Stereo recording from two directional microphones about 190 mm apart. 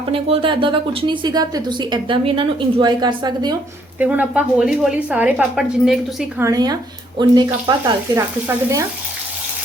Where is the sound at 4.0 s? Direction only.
5° right (ahead or behind).